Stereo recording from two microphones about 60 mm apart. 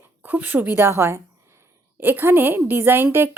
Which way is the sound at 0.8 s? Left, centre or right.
Right.